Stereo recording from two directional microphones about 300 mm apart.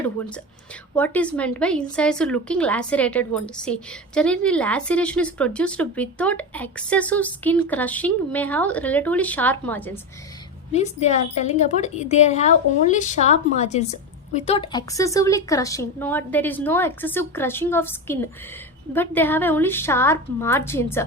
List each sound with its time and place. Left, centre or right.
0.9 s a woman's voice: centre
10.7 s a woman's voice: left